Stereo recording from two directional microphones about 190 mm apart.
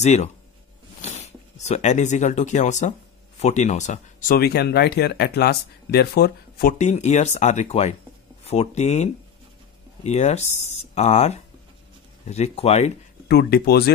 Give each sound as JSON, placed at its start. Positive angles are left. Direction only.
{"t": 0.0, "sound": "speech", "side_deg": 35}
{"t": 4.4, "sound": "speech", "side_deg": 55}
{"t": 6.8, "sound": "speech", "side_deg": 35}
{"t": 13.3, "sound": "speech", "side_deg": 55}